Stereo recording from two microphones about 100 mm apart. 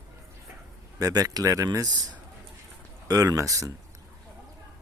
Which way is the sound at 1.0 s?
40° right (ahead or behind).